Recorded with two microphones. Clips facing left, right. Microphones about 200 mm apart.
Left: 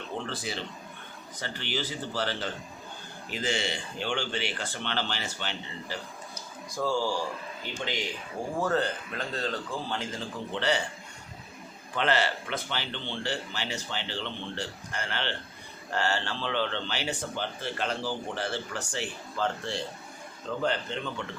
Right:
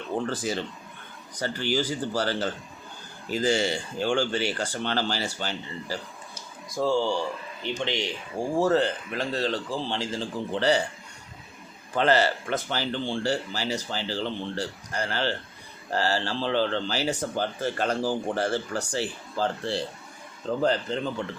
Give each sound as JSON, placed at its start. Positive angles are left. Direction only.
{"t": 0.3, "sound": "speech", "side_deg": -40}
{"t": 6.7, "sound": "speech", "side_deg": -25}
{"t": 11.9, "sound": "speech", "side_deg": -40}